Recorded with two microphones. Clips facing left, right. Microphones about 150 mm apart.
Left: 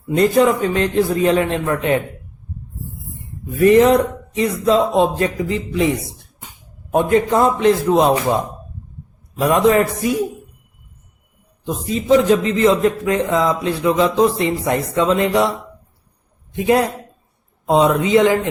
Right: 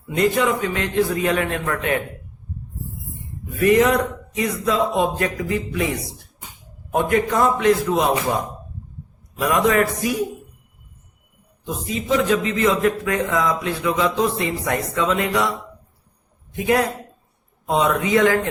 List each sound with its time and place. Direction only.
0.1 s a man's voice: 35° left (ahead or behind)
3.6 s a man's voice: 30° left (ahead or behind)
6.9 s a man's voice: 25° left (ahead or behind)
9.4 s a man's voice: 30° left (ahead or behind)
11.6 s a man's voice: 35° left (ahead or behind)
16.6 s a man's voice: 25° left (ahead or behind)